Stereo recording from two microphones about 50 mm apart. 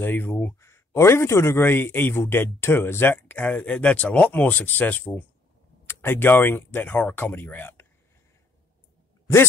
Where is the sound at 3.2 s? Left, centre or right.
Left.